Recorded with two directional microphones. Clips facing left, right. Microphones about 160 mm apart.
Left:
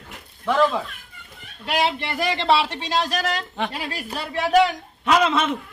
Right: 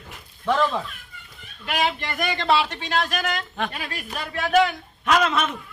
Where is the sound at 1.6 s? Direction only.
30° left (ahead or behind).